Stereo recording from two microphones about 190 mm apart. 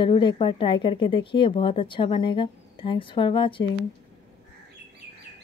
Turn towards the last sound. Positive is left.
turn(degrees=25)  # may be behind; listen again after turning